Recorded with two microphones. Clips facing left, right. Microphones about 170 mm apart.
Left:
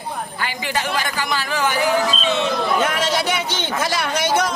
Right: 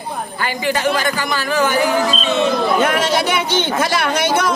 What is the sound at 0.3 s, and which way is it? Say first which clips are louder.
A man's voice: right 6 dB; 45° right (ahead or behind).